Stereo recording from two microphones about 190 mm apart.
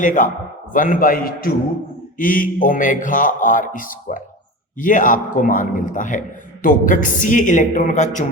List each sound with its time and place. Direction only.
0.0 s a man's voice: 45° left (ahead or behind)